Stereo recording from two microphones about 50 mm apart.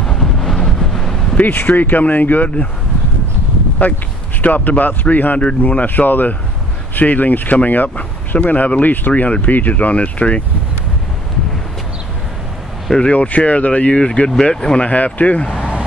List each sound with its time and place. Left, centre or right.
0.1 s wind noise: centre
1.3 s speech: left
3.8 s speech: left
13.1 s speech: left
15.5 s vehicle: centre